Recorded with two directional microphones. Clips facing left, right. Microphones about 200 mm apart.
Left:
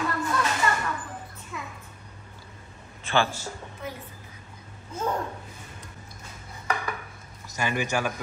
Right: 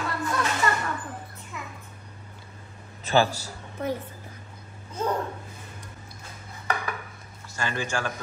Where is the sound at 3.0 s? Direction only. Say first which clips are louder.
Right 3 dB; 40° right (ahead or behind).